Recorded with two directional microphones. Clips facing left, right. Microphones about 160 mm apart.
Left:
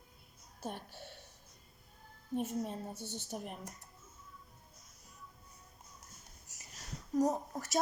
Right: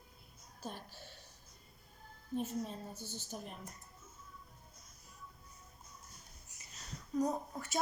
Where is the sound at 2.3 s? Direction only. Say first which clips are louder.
Left 2 dB; 55° left (ahead or behind).